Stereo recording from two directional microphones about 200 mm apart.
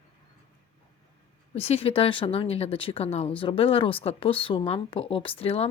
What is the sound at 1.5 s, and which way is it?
Speech, 30° left (ahead or behind).